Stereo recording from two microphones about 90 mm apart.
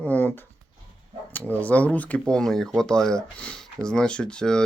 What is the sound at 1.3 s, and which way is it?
Speech, 15° left (ahead or behind).